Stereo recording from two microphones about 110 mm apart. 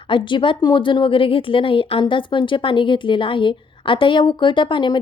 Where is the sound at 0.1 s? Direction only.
45° left (ahead or behind).